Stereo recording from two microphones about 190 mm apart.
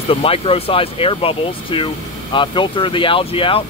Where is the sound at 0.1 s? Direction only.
30° left (ahead or behind).